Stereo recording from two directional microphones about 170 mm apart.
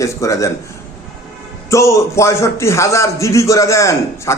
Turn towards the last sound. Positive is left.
turn(degrees=15)  # may be behind; listen again after turning